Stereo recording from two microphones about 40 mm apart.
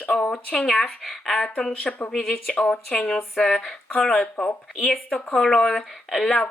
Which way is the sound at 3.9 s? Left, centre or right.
Left.